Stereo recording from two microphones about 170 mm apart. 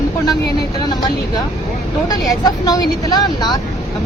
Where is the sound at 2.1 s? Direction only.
25° left (ahead or behind).